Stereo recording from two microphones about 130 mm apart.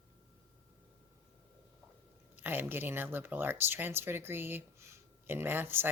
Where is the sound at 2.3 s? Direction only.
15° right (ahead or behind).